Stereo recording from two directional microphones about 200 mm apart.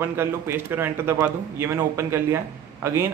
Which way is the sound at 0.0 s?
10° right (ahead or behind).